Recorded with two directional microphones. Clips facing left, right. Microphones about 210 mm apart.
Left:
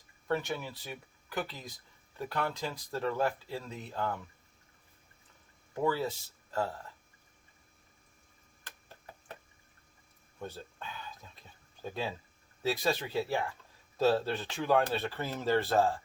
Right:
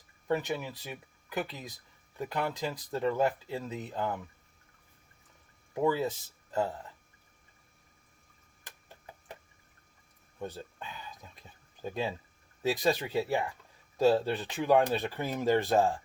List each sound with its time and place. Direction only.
0.4 s speech: 15° right (ahead or behind)
5.7 s speech: 15° right (ahead or behind)
10.4 s a sound: 15° right (ahead or behind)
11.8 s speech: 15° right (ahead or behind)